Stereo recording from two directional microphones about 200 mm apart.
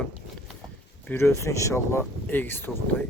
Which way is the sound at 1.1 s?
15° left (ahead or behind).